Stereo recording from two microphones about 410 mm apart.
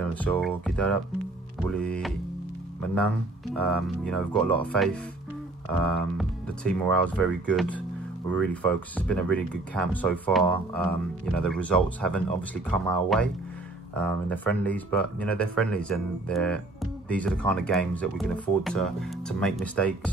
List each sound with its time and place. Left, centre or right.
0.0 s speech: centre
3.5 s speech: centre